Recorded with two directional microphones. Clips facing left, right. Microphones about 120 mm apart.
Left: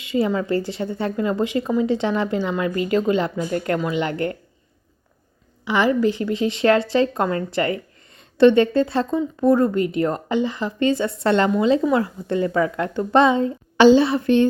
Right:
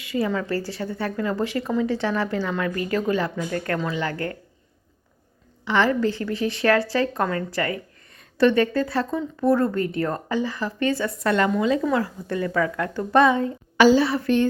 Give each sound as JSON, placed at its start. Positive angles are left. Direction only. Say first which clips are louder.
{"t": 0.0, "sound": "speech", "louder": "left 4 dB", "side_deg": 25}
{"t": 5.6, "sound": "speech", "louder": "left 2 dB", "side_deg": 10}